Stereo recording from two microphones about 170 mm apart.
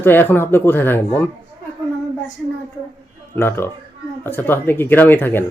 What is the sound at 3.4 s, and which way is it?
Speech, 15° left (ahead or behind).